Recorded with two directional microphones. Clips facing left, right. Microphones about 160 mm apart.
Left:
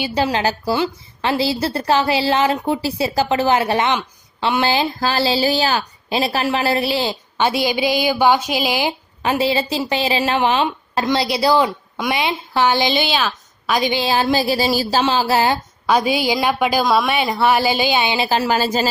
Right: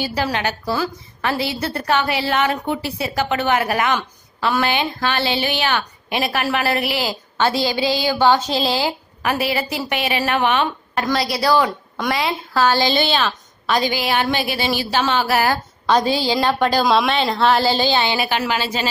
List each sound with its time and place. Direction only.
0.1 s a woman's voice: 30° left (ahead or behind)
7.3 s a woman's voice: 15° left (ahead or behind)
13.8 s a sound: 25° left (ahead or behind)
15.9 s a woman's voice: 10° left (ahead or behind)
18.2 s a woman's voice: 30° left (ahead or behind)
18.5 s a sound: 40° left (ahead or behind)